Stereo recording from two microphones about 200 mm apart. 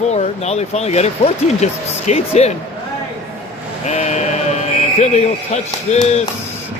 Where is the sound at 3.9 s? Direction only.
35° left (ahead or behind).